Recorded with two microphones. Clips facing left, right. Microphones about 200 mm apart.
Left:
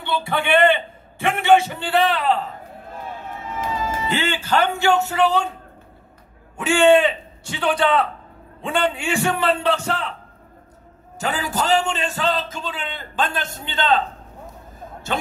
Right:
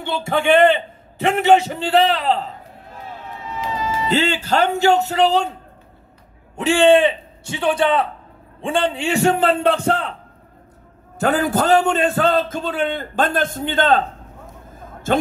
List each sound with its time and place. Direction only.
0.0 s a man's voice: 45° right (ahead or behind)
3.5 s run: 50° left (ahead or behind)
4.1 s speech: 40° right (ahead or behind)
6.5 s a man's voice: 35° right (ahead or behind); by 9.9 s 50° right (ahead or behind)
11.1 s a man's voice: 55° right (ahead or behind)